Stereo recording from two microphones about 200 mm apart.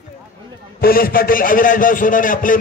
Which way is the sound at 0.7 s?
45° left (ahead or behind).